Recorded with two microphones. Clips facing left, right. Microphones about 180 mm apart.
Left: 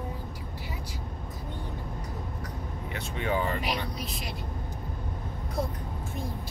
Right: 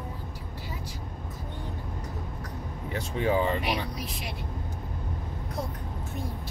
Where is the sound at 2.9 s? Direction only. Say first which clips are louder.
Right 4 dB; 35° right (ahead or behind).